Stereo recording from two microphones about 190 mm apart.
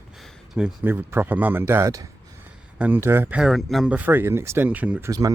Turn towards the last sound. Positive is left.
turn(degrees=-10)  # may be behind; listen again after turning